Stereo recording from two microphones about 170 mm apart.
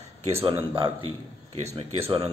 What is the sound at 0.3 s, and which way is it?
Speech, 35° right (ahead or behind).